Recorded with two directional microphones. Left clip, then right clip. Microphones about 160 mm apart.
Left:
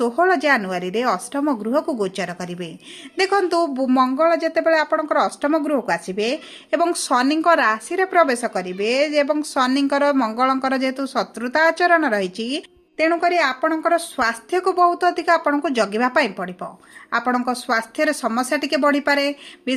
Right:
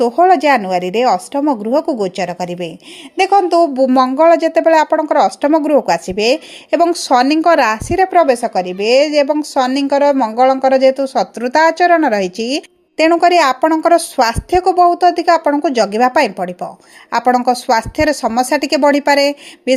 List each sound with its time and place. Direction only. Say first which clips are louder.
0.0 s speech: right 7 dB; 30° right (ahead or behind)
3.9 s speech: right 6 dB; 40° right (ahead or behind)